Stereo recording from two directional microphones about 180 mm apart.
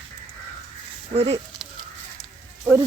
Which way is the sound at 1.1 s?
35° right (ahead or behind).